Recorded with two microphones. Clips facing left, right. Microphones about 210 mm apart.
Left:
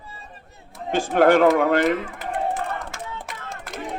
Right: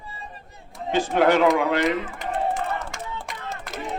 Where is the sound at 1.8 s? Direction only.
Centre (ahead or behind).